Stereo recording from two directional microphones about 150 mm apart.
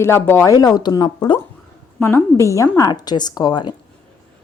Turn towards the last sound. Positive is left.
turn(degrees=25)  # may be behind; listen again after turning